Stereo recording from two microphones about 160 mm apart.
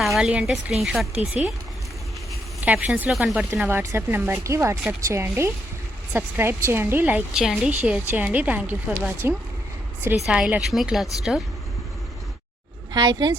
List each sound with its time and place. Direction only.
0.0 s a woman's voice: centre (ahead or behind)
2.6 s a woman's voice: 5° right (ahead or behind)
3.6 s a woman's voice: 15° right (ahead or behind)
12.9 s a woman's voice: 25° right (ahead or behind)